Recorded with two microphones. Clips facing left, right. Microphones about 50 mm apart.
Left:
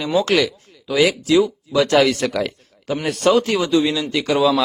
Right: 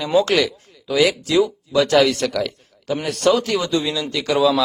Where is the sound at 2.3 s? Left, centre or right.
Left.